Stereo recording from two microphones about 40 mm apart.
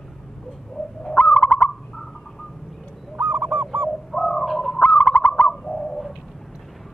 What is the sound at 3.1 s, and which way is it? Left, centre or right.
Goose, right.